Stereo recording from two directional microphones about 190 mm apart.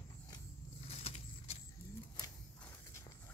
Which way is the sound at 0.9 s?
30° left (ahead or behind).